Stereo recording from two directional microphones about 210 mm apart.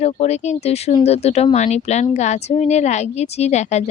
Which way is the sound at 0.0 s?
30° left (ahead or behind).